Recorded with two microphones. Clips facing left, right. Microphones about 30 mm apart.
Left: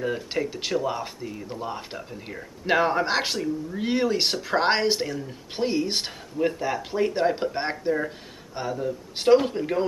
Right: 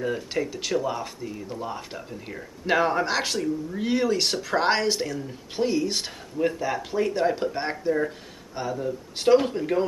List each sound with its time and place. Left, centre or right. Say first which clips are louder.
0.0 s speech: even; centre
0.5 s speech: even; centre
6.3 s speech: even; centre
7.8 s speech: right 1 dB; left
8.5 s speech: even; centre